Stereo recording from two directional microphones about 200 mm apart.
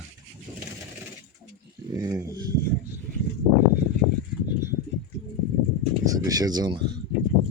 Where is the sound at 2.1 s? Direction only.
15° right (ahead or behind).